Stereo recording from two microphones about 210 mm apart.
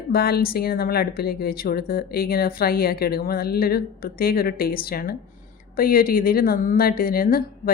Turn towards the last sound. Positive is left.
turn(degrees=45)  # may be behind; listen again after turning